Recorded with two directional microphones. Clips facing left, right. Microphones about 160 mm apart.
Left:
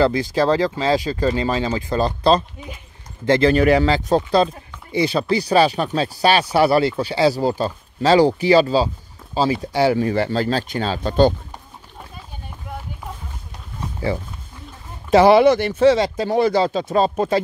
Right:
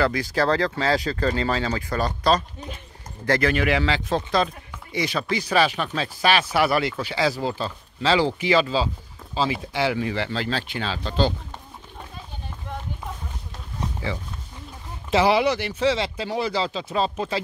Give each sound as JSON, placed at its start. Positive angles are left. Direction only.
{"t": 0.0, "sound": "speech", "side_deg": 25}
{"t": 15.0, "sound": "speech", "side_deg": 55}